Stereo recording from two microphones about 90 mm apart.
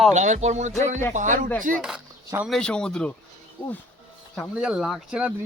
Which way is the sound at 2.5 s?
10° left (ahead or behind).